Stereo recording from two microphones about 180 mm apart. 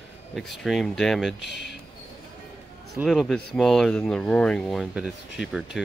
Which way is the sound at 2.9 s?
Centre (ahead or behind).